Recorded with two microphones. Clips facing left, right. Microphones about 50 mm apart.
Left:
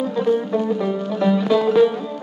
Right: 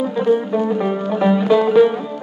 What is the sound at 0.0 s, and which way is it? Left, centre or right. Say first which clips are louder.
Music: right 2 dB; centre.